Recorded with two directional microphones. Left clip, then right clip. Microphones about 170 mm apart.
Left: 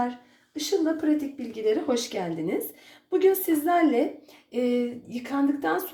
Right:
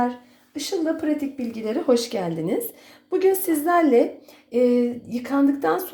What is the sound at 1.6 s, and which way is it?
A woman's voice, 35° right (ahead or behind).